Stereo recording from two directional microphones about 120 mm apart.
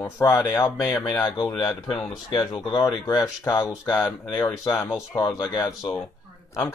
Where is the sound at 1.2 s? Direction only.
35° left (ahead or behind).